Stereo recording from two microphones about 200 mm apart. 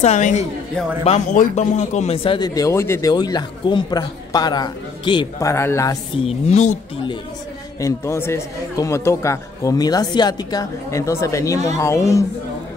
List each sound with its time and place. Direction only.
0.0 s a woman's voice: 35° left (ahead or behind); by 5.9 s 15° left (ahead or behind)
6.2 s a woman's voice: 35° left (ahead or behind)
7.8 s speech: 15° left (ahead or behind)